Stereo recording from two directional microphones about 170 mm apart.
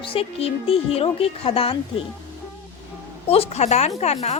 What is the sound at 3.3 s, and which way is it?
A woman's voice, 35° left (ahead or behind).